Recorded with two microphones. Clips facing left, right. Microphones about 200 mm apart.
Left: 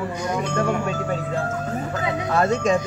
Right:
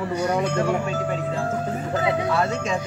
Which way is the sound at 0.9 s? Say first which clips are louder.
Even; 45° left (ahead or behind).